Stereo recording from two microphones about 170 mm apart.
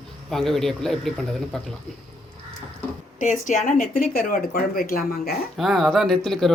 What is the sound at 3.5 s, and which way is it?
Speech, 50° left (ahead or behind).